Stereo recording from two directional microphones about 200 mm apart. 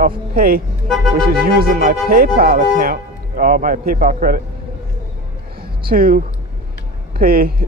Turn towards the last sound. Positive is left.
turn(degrees=-45)  # may be behind; listen again after turning